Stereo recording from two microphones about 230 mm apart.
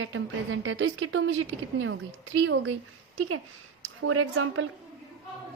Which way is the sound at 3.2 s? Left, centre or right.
Right.